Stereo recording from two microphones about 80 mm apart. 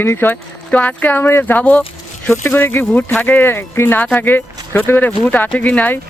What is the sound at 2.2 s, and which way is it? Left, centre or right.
Speech, left.